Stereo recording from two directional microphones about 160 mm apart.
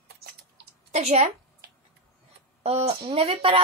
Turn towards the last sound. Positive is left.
turn(degrees=-35)  # may be behind; listen again after turning